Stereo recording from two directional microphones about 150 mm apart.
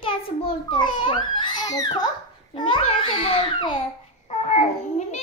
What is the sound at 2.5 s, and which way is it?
A child's voice, 35° left (ahead or behind).